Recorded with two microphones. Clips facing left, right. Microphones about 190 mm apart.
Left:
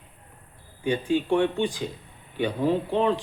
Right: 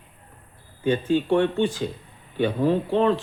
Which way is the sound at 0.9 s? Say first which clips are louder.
Right 3 dB; 15° left (ahead or behind).